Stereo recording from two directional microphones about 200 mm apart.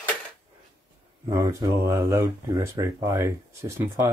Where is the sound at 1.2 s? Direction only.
20° right (ahead or behind).